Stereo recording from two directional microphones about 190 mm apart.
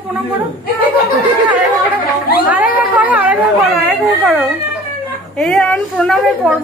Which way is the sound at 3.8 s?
Centre (ahead or behind).